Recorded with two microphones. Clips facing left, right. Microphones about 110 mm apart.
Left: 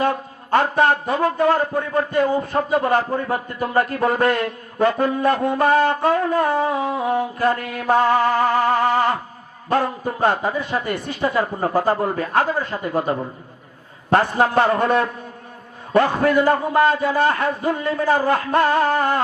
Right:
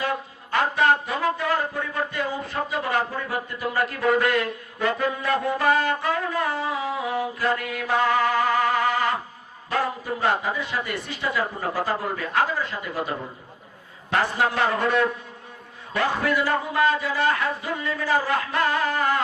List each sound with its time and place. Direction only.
0.0 s a man's voice: 40° left (ahead or behind)